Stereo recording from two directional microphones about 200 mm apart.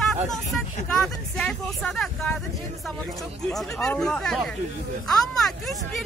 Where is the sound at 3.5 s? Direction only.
Centre (ahead or behind).